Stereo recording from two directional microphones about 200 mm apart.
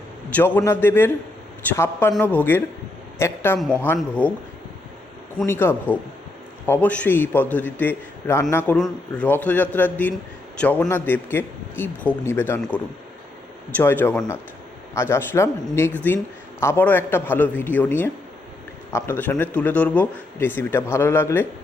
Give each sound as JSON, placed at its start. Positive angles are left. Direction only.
{"t": 0.3, "sound": "a man's voice", "side_deg": 10}
{"t": 5.5, "sound": "a man's voice", "side_deg": 10}